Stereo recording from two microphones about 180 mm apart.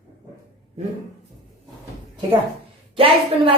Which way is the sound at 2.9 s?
30° right (ahead or behind).